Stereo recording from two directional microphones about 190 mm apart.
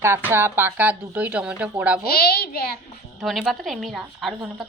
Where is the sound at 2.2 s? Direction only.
55° left (ahead or behind).